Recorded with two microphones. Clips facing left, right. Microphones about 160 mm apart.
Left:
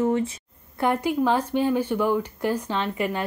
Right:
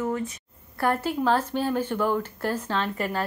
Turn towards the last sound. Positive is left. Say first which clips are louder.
# left 2 dB
turn(degrees=15)  # may be behind; listen again after turning